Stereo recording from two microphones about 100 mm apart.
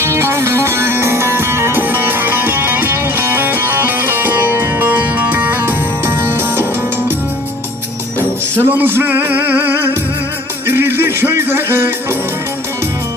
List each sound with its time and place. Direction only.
0.0 s music: 25° right (ahead or behind)
8.5 s music: 20° right (ahead or behind)